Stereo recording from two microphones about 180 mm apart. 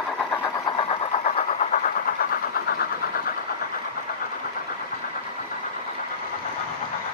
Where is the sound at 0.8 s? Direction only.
30° left (ahead or behind).